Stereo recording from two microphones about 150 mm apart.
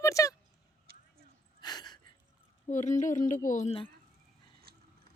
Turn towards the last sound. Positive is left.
turn(degrees=55)  # may be behind; listen again after turning